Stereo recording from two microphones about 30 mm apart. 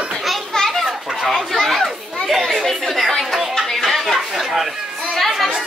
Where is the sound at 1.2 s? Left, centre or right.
Centre.